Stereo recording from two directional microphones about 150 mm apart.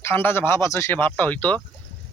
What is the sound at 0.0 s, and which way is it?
Speech, 15° left (ahead or behind).